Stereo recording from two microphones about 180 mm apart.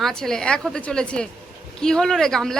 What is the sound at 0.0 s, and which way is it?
Speech, 5° left (ahead or behind).